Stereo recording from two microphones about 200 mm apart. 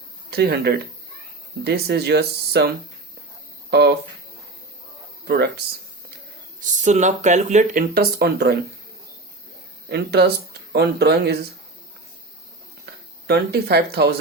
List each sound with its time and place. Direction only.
0.3 s speech: 50° right (ahead or behind)
5.3 s speech: 55° right (ahead or behind)
6.7 s speech: 35° right (ahead or behind); by 8.5 s 55° right (ahead or behind)
9.9 s speech: 55° right (ahead or behind)
12.8 s a sound: 55° right (ahead or behind)